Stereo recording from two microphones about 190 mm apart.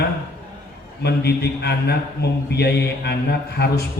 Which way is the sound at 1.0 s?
60° left (ahead or behind).